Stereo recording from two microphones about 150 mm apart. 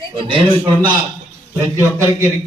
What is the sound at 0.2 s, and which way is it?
Speech, 35° right (ahead or behind).